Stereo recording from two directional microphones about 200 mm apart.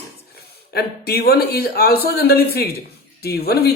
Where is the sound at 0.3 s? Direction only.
50° left (ahead or behind).